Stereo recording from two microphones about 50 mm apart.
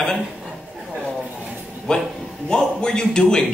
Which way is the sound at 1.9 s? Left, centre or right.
Centre.